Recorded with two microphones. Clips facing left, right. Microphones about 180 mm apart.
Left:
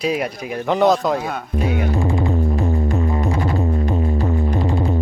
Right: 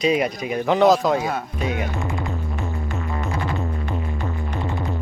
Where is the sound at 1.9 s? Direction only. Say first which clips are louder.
Left 8 dB; 30° left (ahead or behind).